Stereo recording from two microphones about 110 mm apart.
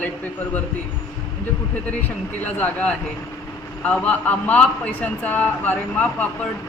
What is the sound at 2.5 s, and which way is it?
A man's voice, 15° left (ahead or behind).